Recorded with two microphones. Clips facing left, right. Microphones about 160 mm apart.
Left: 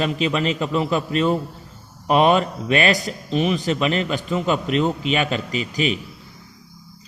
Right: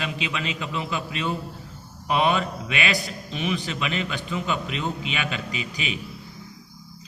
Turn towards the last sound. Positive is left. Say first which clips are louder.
# left 8 dB
turn(degrees=40)  # may be behind; listen again after turning